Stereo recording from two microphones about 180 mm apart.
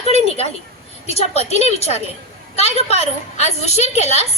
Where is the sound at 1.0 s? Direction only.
35° left (ahead or behind).